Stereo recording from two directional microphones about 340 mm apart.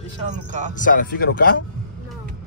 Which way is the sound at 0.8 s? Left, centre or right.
Left.